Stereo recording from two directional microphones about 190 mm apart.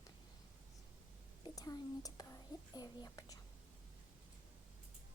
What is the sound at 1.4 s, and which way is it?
Speech, 20° left (ahead or behind).